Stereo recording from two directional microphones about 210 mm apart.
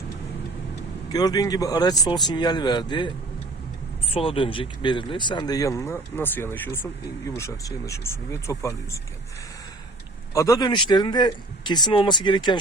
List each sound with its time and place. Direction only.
1.1 s speech: 20° left (ahead or behind)
4.1 s speech: 25° left (ahead or behind)
10.3 s speech: 15° left (ahead or behind)